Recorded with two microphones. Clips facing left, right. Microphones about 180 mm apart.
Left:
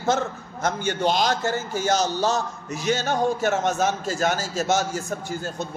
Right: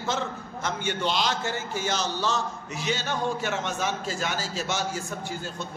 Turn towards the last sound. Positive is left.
turn(degrees=45)  # may be behind; listen again after turning